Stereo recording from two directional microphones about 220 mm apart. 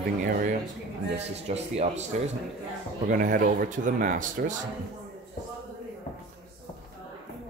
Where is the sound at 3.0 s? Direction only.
40° right (ahead or behind).